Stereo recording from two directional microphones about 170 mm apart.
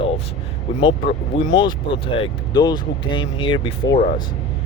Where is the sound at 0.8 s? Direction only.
90° left.